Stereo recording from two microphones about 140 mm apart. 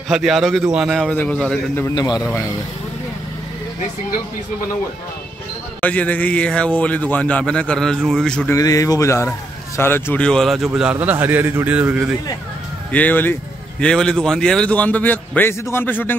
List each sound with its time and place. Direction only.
0.1 s a man's voice: centre (ahead or behind)
1.1 s a man's voice: 10° left (ahead or behind)
1.8 s a man's voice: 25° left (ahead or behind)
5.8 s a man's voice: 10° left (ahead or behind)
8.5 s a man's voice: 25° left (ahead or behind); by 12.1 s 10° right (ahead or behind)
12.9 s a man's voice: 10° left (ahead or behind)